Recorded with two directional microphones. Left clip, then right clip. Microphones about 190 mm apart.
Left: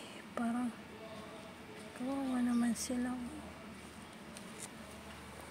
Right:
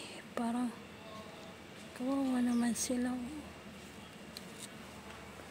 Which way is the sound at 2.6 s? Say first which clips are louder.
Right 2 dB; 20° right (ahead or behind).